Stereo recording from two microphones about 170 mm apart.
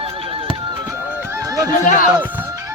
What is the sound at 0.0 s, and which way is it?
Neigh, 35° right (ahead or behind).